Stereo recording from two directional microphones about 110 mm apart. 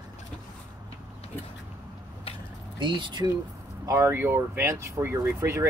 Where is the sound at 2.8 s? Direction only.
45° right (ahead or behind).